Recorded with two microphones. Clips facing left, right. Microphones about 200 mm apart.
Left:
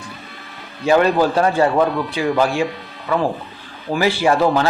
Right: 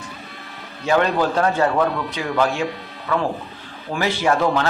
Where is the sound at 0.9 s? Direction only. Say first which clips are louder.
Left 4 dB; 5° left (ahead or behind).